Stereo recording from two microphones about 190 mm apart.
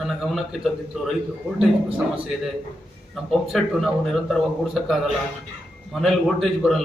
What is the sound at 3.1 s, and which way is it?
A man's voice, centre (ahead or behind).